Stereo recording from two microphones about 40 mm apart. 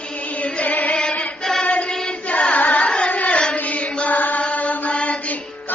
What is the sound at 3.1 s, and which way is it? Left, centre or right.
Hands, left.